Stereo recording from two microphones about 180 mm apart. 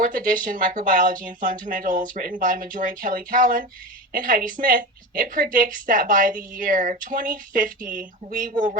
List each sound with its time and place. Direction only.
0.0 s a woman's voice: 50° right (ahead or behind)